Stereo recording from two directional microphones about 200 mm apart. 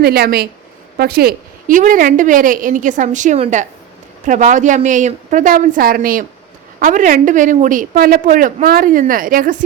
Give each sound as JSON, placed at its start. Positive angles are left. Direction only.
{"t": 0.0, "sound": "a woman's voice", "side_deg": -50}